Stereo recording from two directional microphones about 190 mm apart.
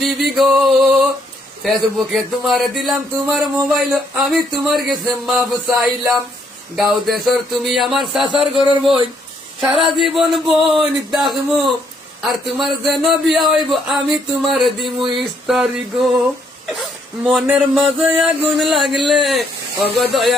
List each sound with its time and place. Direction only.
0.0 s speech: centre (ahead or behind)
10.0 s speech: centre (ahead or behind)
14.9 s a sound: 25° right (ahead or behind)
15.2 s speech: centre (ahead or behind)